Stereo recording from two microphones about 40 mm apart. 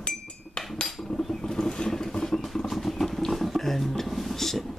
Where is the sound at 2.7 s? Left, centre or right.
Centre.